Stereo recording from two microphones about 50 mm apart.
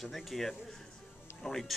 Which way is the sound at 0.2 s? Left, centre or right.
Centre.